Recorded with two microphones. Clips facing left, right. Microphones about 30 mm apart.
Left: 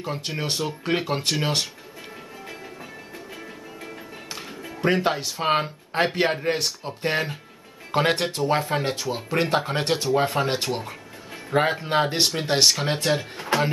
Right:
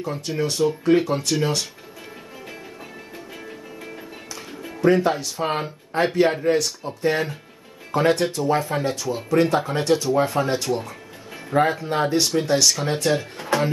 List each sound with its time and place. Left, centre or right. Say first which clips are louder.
0.0 s speech: right 4 dB; left
4.6 s music: right 1 dB; centre
4.8 s speech: right 4 dB; left
13.4 s speech: right 1 dB; centre